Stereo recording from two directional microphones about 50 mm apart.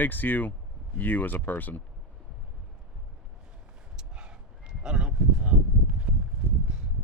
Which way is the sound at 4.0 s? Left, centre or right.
Centre.